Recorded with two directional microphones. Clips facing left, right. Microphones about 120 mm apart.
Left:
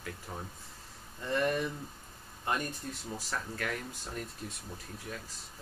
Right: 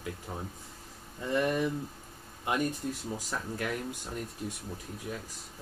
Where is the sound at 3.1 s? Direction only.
15° right (ahead or behind).